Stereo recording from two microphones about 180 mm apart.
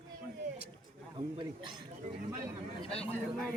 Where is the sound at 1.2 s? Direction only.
30° right (ahead or behind).